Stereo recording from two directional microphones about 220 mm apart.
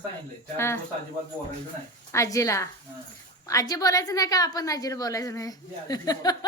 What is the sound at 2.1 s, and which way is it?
A woman's voice, 15° left (ahead or behind).